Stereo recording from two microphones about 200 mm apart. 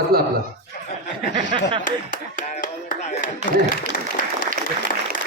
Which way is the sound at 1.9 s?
40° left (ahead or behind).